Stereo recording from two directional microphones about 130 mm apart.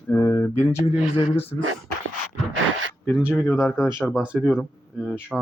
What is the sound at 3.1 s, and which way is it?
Speech, 10° right (ahead or behind).